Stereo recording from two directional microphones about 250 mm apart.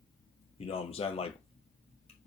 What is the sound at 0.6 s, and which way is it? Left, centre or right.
Speech, left.